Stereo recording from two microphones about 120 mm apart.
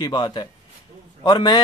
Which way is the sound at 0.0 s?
40° left (ahead or behind).